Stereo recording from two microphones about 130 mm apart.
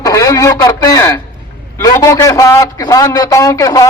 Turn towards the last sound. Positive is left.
turn(degrees=25)  # may be behind; listen again after turning